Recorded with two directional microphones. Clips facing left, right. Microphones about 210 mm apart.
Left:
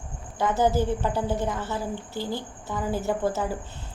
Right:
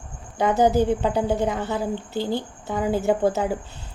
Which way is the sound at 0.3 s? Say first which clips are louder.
Right 4 dB; 15° right (ahead or behind).